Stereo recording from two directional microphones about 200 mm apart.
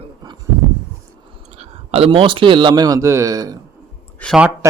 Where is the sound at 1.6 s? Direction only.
30° right (ahead or behind).